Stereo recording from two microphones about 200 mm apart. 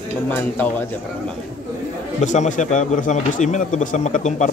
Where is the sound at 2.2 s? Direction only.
35° left (ahead or behind).